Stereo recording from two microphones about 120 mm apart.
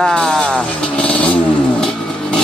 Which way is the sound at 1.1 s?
10° left (ahead or behind).